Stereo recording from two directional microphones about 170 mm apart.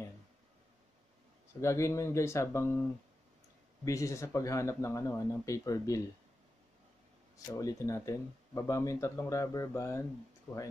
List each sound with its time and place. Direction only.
1.6 s speech: 15° left (ahead or behind)
3.8 s speech: 20° left (ahead or behind)
7.3 s speech: 20° left (ahead or behind)